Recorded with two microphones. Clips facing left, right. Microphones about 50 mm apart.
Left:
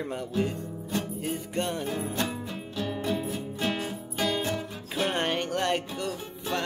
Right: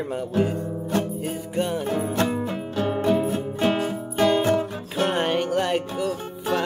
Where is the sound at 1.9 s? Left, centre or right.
Right.